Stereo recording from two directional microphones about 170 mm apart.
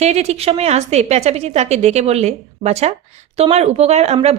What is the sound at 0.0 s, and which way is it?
A woman's voice, 40° right (ahead or behind).